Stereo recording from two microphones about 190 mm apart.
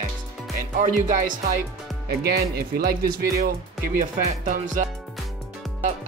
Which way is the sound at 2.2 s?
55° right (ahead or behind).